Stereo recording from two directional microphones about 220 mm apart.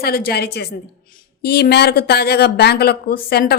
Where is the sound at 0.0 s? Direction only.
45° left (ahead or behind).